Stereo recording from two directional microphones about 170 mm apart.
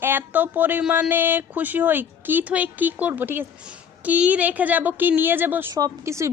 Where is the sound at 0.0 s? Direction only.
10° right (ahead or behind).